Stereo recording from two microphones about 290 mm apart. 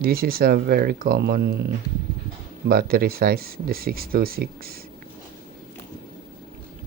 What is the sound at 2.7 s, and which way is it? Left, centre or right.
Speech, right.